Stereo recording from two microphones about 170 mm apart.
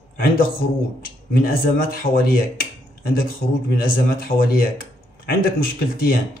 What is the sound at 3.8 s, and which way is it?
Speech, 55° left (ahead or behind).